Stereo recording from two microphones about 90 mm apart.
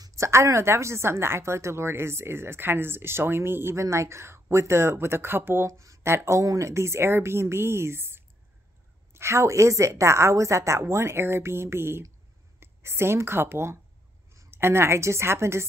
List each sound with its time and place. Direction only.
0.0 s a woman's voice: 35° right (ahead or behind)
5.7 s a woman's voice: 35° right (ahead or behind)